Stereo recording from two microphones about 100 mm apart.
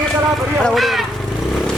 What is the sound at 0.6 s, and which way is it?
Speech, 5° left (ahead or behind).